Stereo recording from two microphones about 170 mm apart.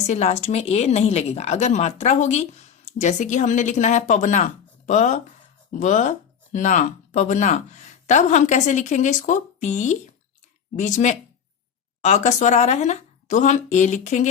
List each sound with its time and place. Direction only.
0.1 s speech: 40° left (ahead or behind)